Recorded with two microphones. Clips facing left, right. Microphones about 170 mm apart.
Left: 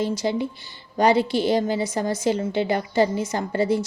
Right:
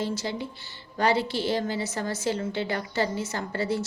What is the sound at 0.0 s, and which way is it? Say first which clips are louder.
Speech: left 6 dB; 15° left (ahead or behind).